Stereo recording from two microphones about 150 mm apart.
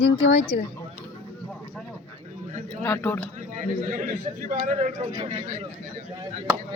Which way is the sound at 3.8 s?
60° right (ahead or behind).